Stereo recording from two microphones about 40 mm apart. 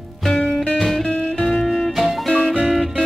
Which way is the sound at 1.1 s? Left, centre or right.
Left.